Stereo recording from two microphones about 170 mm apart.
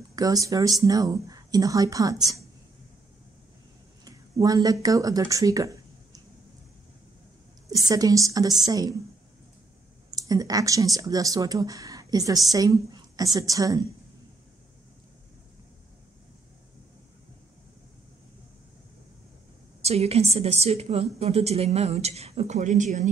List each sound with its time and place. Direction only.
0.1 s speech: 20° right (ahead or behind)
4.0 s speech: 20° right (ahead or behind)
7.9 s speech: 20° right (ahead or behind)
10.1 s speech: 20° right (ahead or behind)
19.8 s a woman's voice: 40° right (ahead or behind)